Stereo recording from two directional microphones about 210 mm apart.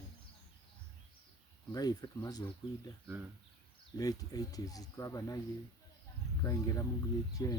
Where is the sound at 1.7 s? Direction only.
20° left (ahead or behind).